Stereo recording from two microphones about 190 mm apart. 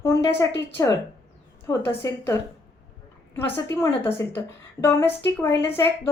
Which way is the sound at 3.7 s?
15° left (ahead or behind).